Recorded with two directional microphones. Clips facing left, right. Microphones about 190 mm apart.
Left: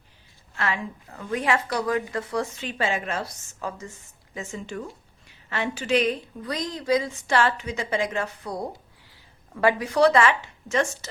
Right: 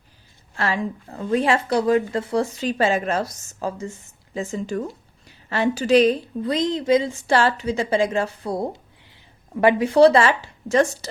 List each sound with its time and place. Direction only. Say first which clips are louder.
0.5 s a woman's voice: right 5 dB; 35° right (ahead or behind)